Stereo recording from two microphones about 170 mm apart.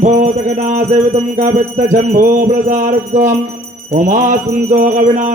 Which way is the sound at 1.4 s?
45° right (ahead or behind).